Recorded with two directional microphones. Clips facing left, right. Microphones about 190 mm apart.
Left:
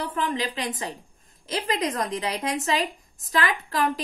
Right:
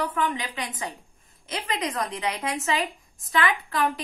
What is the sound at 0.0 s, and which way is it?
A woman's voice, 35° left (ahead or behind).